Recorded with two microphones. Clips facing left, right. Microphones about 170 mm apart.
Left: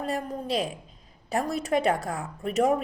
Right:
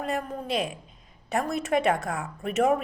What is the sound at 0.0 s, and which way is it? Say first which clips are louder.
Speech: even; 35° left (ahead or behind).